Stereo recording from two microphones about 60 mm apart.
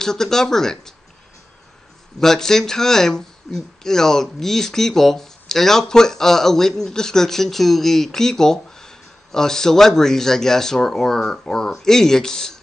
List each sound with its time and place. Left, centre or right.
0.0 s speech: centre
2.1 s speech: centre